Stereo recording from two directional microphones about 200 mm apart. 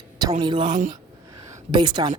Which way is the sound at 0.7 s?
35° right (ahead or behind).